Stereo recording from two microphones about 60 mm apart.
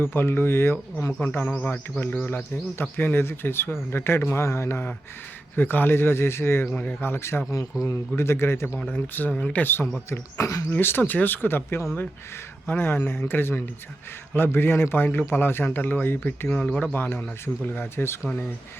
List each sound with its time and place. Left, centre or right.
0.0 s a man's voice: left
8.9 s speech: left
10.1 s speech: left
10.7 s a man's voice: left